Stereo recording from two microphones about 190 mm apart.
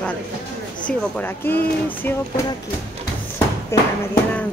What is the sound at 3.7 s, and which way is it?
Speech, 15° left (ahead or behind).